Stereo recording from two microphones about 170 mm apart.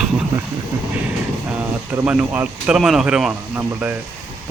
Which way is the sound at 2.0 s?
10° right (ahead or behind).